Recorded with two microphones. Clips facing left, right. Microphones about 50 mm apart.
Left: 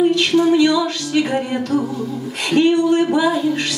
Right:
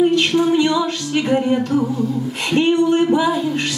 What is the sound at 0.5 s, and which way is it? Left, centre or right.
Speech, right.